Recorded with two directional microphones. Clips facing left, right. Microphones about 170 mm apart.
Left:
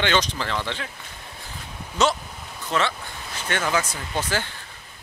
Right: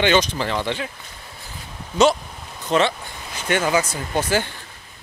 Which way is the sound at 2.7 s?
20° right (ahead or behind).